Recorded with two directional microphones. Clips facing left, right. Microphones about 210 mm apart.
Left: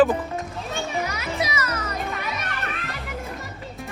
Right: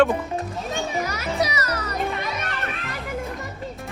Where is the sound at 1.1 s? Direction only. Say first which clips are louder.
Right 3 dB; 40° right (ahead or behind).